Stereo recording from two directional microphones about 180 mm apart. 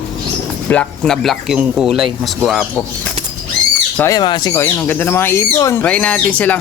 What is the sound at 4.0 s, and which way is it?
Speech, 20° left (ahead or behind).